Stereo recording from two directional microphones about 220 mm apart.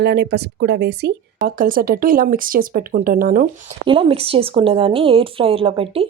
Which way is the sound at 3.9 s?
25° right (ahead or behind).